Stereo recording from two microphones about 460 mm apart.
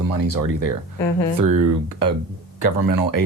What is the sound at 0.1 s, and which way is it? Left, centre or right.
Speech, left.